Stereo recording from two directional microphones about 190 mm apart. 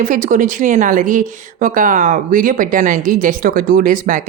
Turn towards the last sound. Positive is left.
turn(degrees=-45)  # may be behind; listen again after turning